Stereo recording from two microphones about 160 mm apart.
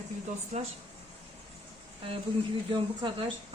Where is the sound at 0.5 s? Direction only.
50° right (ahead or behind).